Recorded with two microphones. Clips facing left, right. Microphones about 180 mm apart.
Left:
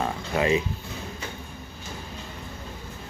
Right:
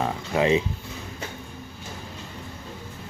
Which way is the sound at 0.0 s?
20° right (ahead or behind).